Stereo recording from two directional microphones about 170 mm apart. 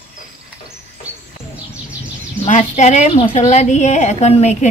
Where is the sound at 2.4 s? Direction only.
40° left (ahead or behind).